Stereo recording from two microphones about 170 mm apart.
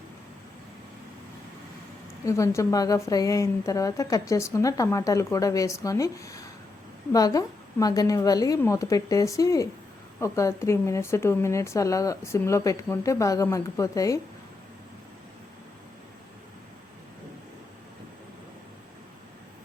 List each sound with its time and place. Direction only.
2.2 s a woman's voice: 15° left (ahead or behind)